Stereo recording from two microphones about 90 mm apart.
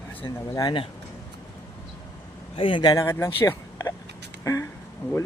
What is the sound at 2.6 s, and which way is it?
Speech, 75° left (ahead or behind).